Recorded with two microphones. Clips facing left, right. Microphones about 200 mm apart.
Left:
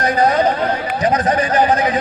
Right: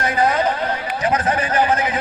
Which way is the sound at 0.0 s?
40° left (ahead or behind).